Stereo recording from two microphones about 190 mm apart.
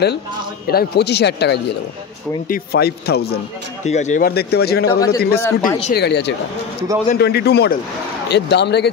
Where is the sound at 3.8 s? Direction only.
40° left (ahead or behind).